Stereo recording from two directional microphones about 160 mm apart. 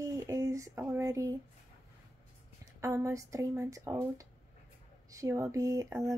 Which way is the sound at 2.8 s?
20° right (ahead or behind).